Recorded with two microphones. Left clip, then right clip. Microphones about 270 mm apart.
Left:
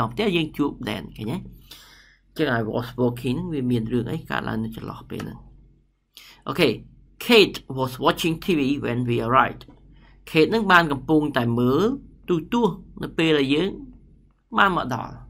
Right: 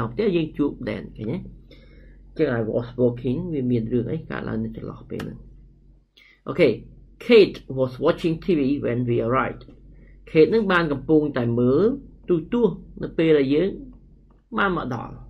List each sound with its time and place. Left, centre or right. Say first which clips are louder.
0.0 s speech: even; centre